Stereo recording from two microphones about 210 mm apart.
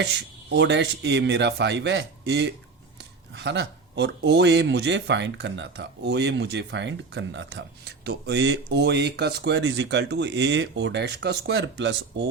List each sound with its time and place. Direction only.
0.0 s speech: 55° right (ahead or behind)